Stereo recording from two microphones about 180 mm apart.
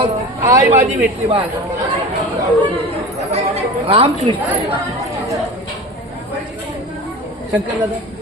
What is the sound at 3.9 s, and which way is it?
Speech, 30° right (ahead or behind).